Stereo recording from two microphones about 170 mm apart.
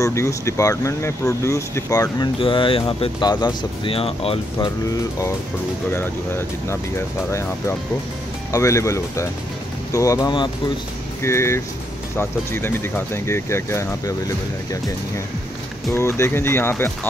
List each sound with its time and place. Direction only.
0.0 s speech: 15° left (ahead or behind)
2.3 s speech: 30° left (ahead or behind)
5.9 s speech: 15° left (ahead or behind)
15.9 s speech: 15° left (ahead or behind)